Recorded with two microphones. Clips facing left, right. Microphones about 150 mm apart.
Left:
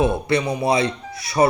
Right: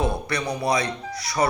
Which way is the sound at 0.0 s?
25° left (ahead or behind).